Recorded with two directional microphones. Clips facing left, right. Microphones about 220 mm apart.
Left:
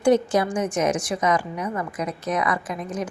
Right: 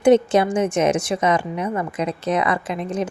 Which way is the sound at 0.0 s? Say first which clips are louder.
Right 4 dB; 25° right (ahead or behind).